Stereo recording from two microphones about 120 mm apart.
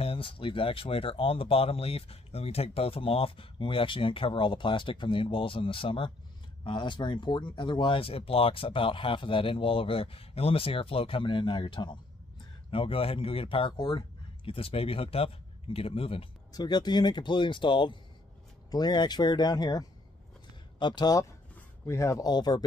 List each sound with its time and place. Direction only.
0.0 s speech: 50° left (ahead or behind)
16.5 s speech: 35° left (ahead or behind)